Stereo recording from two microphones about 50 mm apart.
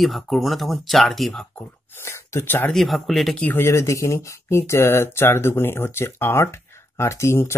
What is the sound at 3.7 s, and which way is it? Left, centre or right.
Speech, left.